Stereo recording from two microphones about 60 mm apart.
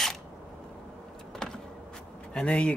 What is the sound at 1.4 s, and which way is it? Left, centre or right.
Power windows, centre.